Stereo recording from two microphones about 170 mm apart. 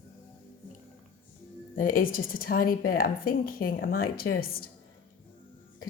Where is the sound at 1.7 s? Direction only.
55° left (ahead or behind).